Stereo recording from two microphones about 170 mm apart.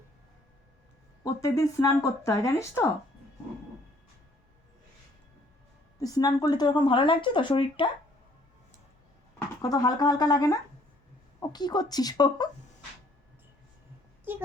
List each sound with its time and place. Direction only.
1.2 s speech: 20° left (ahead or behind)
6.0 s speech: 20° left (ahead or behind)
9.6 s speech: 20° left (ahead or behind)